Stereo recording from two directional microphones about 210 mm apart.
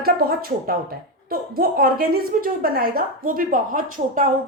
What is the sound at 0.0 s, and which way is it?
Speech, 45° right (ahead or behind).